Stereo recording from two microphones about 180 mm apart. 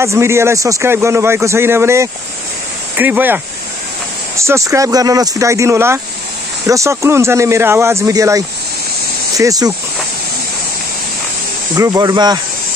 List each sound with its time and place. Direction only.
0.0 s a man's voice: 15° right (ahead or behind)
4.4 s a man's voice: 15° right (ahead or behind)
11.7 s speech: 20° right (ahead or behind)